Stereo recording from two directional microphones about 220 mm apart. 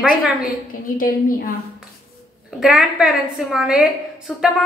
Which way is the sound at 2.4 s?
5° right (ahead or behind).